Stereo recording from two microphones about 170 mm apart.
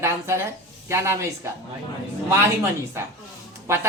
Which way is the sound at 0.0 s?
15° right (ahead or behind).